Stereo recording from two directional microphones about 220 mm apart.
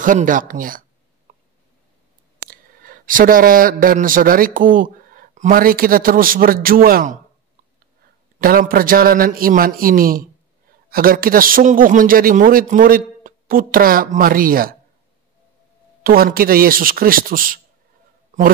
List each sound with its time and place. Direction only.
0.0 s a sound: 35° right (ahead or behind)
2.4 s a man's voice: 40° right (ahead or behind)
8.4 s a man's voice: 40° right (ahead or behind)
16.0 s a man's voice: 40° right (ahead or behind)